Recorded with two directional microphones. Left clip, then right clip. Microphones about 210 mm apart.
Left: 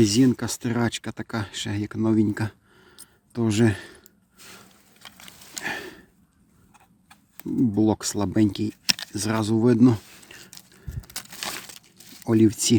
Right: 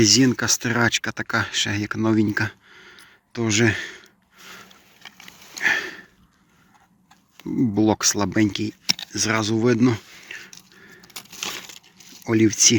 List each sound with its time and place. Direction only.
0.0 s speech: 15° left (ahead or behind)
5.6 s sniff: 20° left (ahead or behind)
7.8 s speech: 15° left (ahead or behind); by 10.6 s 30° left (ahead or behind)
12.3 s speech: 30° left (ahead or behind)